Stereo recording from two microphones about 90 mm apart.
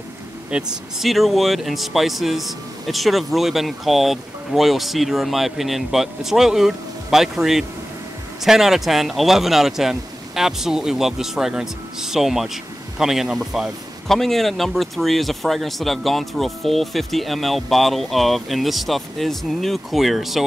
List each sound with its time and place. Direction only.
0.5 s a man's voice: 5° right (ahead or behind)